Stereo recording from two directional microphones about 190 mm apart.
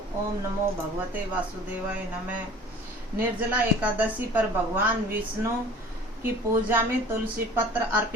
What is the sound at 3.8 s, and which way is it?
Speech, 10° right (ahead or behind).